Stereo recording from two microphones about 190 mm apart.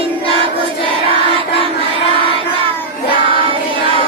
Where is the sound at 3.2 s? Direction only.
25° right (ahead or behind).